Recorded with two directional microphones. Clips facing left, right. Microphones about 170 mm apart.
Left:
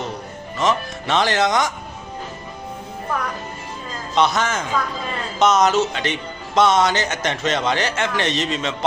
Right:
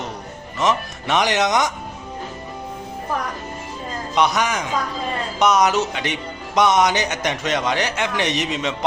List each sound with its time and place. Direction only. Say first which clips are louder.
0.6 s speech: even; 15° right (ahead or behind)
4.1 s speech: left 1 dB; 15° right (ahead or behind)